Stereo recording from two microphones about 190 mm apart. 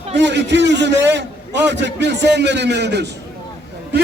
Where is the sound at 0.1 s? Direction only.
65° right (ahead or behind).